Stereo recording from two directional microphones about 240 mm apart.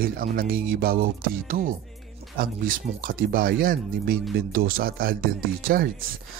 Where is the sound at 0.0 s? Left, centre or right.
Right.